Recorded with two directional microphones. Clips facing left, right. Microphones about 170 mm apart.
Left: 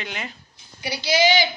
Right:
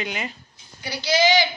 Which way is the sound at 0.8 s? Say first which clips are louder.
Even; 10° left (ahead or behind).